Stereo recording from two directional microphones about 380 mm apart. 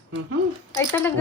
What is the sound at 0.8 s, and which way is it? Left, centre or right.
Speech, centre.